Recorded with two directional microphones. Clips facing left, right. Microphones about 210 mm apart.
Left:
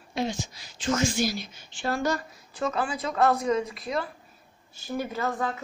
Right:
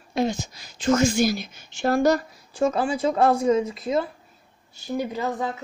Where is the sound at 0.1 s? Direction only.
45° right (ahead or behind); by 5.5 s 15° right (ahead or behind).